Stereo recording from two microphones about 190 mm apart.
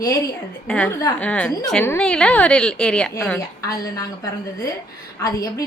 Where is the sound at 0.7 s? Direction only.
5° left (ahead or behind).